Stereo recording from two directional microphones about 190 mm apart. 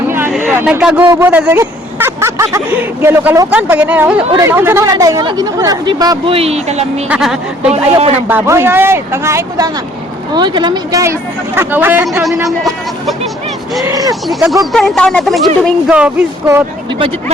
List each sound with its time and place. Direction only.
0.1 s a sound: 10° right (ahead or behind)
3.0 s speech: 10° right (ahead or behind); by 7.0 s 35° right (ahead or behind)
7.1 s speech: 5° right (ahead or behind)
13.8 s speech: 20° right (ahead or behind)
14.3 s speech: centre (ahead or behind)